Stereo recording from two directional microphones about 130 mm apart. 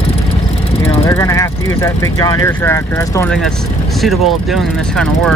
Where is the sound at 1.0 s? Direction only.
25° left (ahead or behind).